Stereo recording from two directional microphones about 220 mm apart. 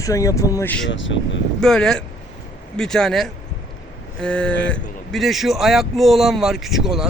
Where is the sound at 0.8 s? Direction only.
55° left (ahead or behind).